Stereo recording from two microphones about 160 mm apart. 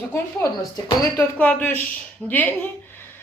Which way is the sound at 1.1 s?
10° left (ahead or behind).